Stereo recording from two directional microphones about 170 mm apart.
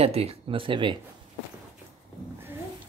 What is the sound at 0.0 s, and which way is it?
Speech, 35° right (ahead or behind).